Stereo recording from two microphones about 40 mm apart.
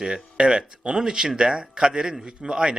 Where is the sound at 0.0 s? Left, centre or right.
Right.